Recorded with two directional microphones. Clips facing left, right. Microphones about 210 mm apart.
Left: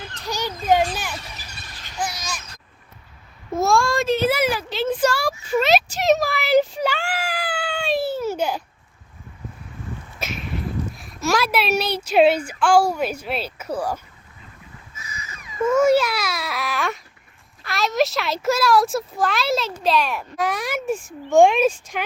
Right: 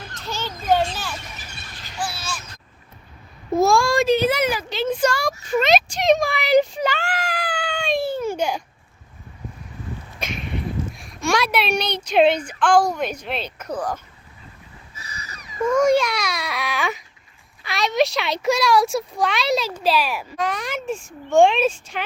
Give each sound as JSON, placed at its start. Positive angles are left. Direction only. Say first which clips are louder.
{"t": 0.3, "sound": "children playing", "louder": "left 1 dB", "side_deg": 15}
{"t": 2.0, "sound": "speech", "louder": "left 1 dB", "side_deg": 20}
{"t": 3.6, "sound": "a child's voice", "louder": "right 2 dB", "side_deg": 0}
{"t": 5.5, "sound": "a sound", "louder": "even", "side_deg": 5}
{"t": 10.2, "sound": "speech", "louder": "right 1 dB", "side_deg": 5}
{"t": 14.9, "sound": "a sound", "louder": "even", "side_deg": -35}
{"t": 15.6, "sound": "speech", "louder": "left 1 dB", "side_deg": 5}
{"t": 20.3, "sound": "speech", "louder": "left 3 dB", "side_deg": 10}